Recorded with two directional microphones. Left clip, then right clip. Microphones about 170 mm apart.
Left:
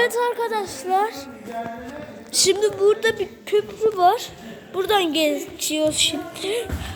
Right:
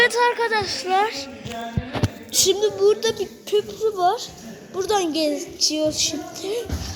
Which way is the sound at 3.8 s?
15° left (ahead or behind).